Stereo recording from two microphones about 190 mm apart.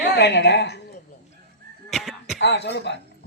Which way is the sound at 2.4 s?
65° left (ahead or behind).